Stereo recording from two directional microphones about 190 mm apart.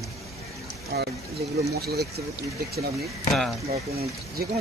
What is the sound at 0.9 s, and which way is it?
Speech, 55° right (ahead or behind).